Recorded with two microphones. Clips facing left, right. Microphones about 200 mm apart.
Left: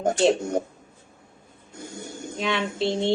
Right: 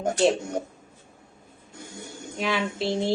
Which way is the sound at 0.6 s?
50° left (ahead or behind).